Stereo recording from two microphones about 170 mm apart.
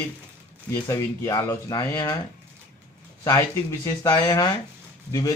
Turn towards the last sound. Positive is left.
turn(degrees=20)  # may be behind; listen again after turning